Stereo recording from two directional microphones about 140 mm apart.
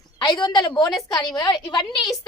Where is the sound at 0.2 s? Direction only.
30° left (ahead or behind).